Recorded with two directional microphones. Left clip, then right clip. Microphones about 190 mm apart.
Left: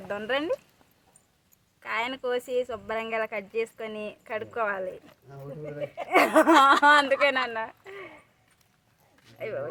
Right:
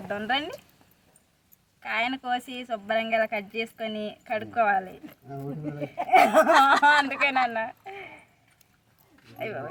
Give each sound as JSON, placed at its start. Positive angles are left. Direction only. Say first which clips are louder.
{"t": 0.1, "sound": "a woman's voice", "louder": "right 1 dB", "side_deg": 40}
{"t": 1.8, "sound": "a woman's voice", "louder": "right 2 dB", "side_deg": 40}
{"t": 6.1, "sound": "speech", "louder": "right 2 dB", "side_deg": 45}
{"t": 9.4, "sound": "a woman's voice", "louder": "even", "side_deg": 35}